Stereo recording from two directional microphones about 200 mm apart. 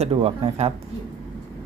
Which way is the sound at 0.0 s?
30° right (ahead or behind).